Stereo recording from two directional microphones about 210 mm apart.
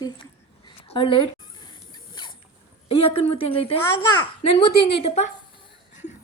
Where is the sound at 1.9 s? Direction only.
20° left (ahead or behind).